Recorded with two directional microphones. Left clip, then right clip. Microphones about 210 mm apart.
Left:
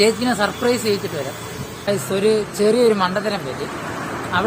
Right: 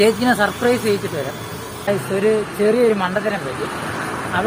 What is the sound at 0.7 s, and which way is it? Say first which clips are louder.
A woman's voice: right 1 dB; 10° left (ahead or behind).